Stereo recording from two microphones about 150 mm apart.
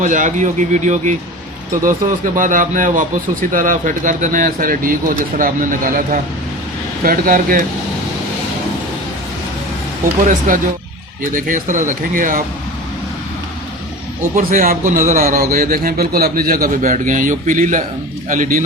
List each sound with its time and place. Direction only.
0.0 s a man's voice: 55° right (ahead or behind)
10.2 s speech: 60° right (ahead or behind)
14.3 s a man's voice: 65° right (ahead or behind)